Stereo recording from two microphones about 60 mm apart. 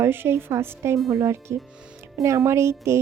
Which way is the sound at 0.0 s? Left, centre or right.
Right.